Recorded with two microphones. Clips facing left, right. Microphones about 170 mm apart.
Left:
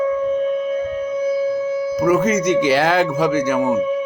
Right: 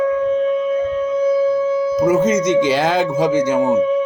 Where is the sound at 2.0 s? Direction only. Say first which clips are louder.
Even; 20° right (ahead or behind).